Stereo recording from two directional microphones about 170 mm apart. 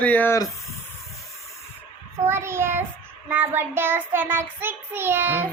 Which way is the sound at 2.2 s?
15° right (ahead or behind).